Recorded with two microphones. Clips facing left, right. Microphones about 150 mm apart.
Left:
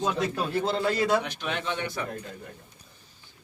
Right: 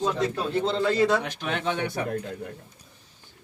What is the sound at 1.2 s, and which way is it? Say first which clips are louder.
Speech: right 2 dB; 45° right (ahead or behind).